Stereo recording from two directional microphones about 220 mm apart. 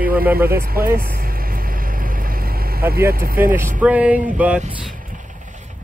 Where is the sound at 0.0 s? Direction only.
40° right (ahead or behind).